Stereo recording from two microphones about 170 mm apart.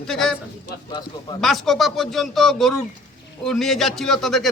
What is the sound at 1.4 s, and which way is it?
Speech, centre (ahead or behind).